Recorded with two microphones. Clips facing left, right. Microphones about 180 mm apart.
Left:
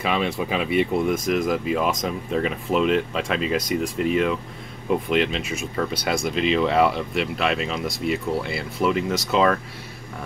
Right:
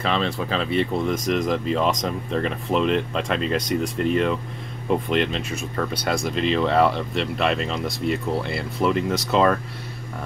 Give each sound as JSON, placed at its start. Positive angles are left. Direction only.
{"t": 0.0, "sound": "speech", "side_deg": 10}